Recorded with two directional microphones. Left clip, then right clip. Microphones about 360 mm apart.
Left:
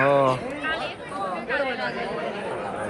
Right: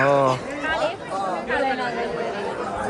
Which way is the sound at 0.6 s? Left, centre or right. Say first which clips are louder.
Right 5 dB; right.